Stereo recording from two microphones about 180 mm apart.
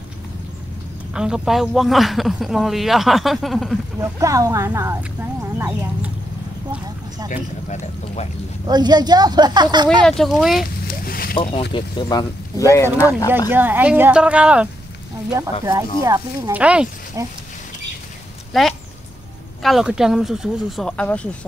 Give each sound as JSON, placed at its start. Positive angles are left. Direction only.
{"t": 1.1, "sound": "speech", "side_deg": -5}
{"t": 4.0, "sound": "speech", "side_deg": -20}
{"t": 7.2, "sound": "speech", "side_deg": 40}
{"t": 8.6, "sound": "speech", "side_deg": -20}
{"t": 10.0, "sound": "speech", "side_deg": 0}
{"t": 10.9, "sound": "speech", "side_deg": 55}
{"t": 11.7, "sound": "speech", "side_deg": 25}
{"t": 13.5, "sound": "speech", "side_deg": -10}
{"t": 16.0, "sound": "speech", "side_deg": -20}
{"t": 16.5, "sound": "speech", "side_deg": -5}
{"t": 17.2, "sound": "speech", "side_deg": -15}
{"t": 18.5, "sound": "a sound", "side_deg": 0}
{"t": 19.6, "sound": "speech", "side_deg": 0}